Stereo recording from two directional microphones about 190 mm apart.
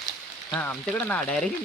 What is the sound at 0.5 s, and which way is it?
Speech, 10° left (ahead or behind).